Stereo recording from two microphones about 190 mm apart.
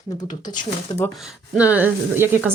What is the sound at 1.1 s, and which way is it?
Speech, centre (ahead or behind).